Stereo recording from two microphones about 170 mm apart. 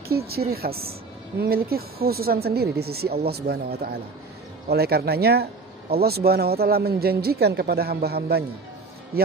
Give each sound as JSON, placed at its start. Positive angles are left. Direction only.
{"t": 0.3, "sound": "a woman's voice", "side_deg": -65}